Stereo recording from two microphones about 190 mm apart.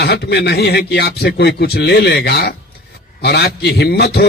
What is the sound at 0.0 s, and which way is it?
A man's voice, 60° left (ahead or behind).